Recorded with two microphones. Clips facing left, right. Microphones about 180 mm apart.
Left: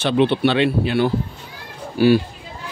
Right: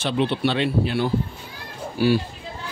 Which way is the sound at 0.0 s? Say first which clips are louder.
Left 5 dB; 65° left (ahead or behind).